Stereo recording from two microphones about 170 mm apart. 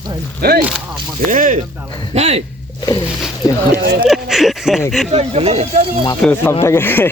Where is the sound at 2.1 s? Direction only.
40° right (ahead or behind).